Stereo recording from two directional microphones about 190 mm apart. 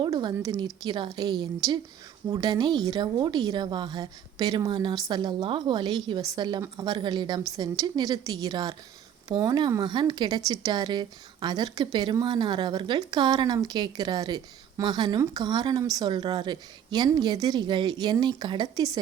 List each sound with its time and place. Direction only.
0.0 s speech: 25° right (ahead or behind)